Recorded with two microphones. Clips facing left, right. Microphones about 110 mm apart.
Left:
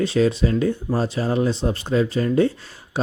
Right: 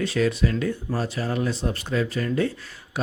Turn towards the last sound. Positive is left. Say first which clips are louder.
# left 4 dB
turn(degrees=30)  # may be behind; listen again after turning